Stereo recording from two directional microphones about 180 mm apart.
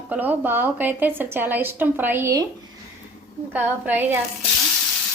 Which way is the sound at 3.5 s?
10° right (ahead or behind).